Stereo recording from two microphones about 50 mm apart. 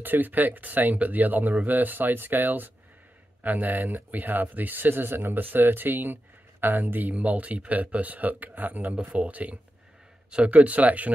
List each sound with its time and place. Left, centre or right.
0.0 s speech: right